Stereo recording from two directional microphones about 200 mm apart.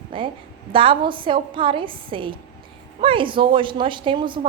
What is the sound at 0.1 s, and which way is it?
A woman's voice, 25° right (ahead or behind).